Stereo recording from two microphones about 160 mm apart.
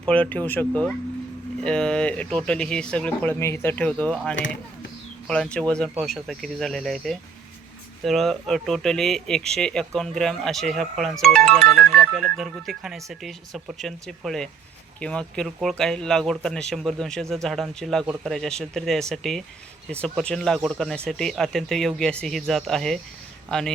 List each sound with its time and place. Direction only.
0.0 s speech: 10° left (ahead or behind)